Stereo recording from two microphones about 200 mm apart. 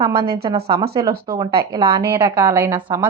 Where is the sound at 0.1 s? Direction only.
50° right (ahead or behind).